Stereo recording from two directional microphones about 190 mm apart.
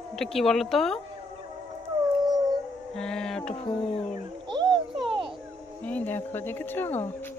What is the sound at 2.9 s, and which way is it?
Mantra, 5° left (ahead or behind).